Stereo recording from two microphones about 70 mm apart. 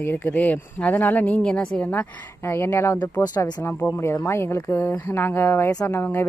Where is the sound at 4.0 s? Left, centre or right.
Left.